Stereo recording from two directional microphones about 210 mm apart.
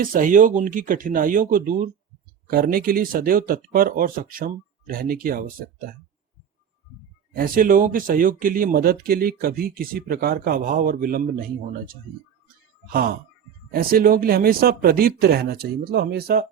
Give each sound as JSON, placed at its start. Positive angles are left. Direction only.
{"t": 0.0, "sound": "speech", "side_deg": -40}
{"t": 7.3, "sound": "speech", "side_deg": -45}
{"t": 12.9, "sound": "speech", "side_deg": -45}